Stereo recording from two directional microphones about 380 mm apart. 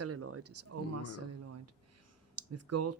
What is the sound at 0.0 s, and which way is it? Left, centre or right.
Speech, right.